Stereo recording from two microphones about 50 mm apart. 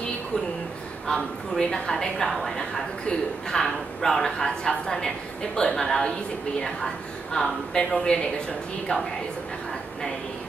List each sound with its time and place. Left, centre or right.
1.0 s a man's voice: centre
7.3 s a man's voice: centre